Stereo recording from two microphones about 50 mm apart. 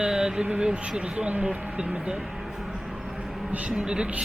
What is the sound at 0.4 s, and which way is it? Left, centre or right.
Speech, right.